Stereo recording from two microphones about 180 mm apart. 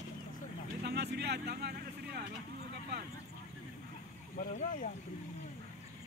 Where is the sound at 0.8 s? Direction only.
65° right (ahead or behind).